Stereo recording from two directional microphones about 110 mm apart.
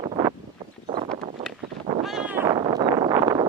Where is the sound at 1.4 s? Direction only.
35° right (ahead or behind).